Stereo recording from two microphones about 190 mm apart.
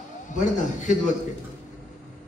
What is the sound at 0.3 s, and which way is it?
Speech, 40° left (ahead or behind).